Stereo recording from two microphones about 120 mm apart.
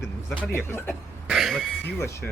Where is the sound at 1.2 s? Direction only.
Centre (ahead or behind).